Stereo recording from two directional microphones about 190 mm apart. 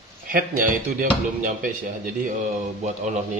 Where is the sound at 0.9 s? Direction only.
45° right (ahead or behind).